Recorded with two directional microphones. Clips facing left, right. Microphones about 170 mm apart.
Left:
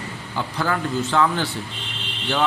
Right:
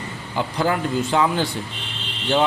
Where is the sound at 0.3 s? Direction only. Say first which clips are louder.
Right 3 dB; 15° right (ahead or behind).